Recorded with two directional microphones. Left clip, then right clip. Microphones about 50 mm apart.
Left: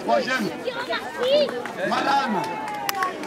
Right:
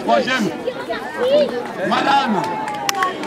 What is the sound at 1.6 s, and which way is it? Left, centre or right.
Speech, centre.